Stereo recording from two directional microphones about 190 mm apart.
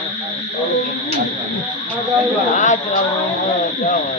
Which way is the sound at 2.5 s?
40° left (ahead or behind).